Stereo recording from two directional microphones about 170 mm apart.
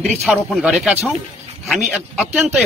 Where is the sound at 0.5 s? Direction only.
5° right (ahead or behind).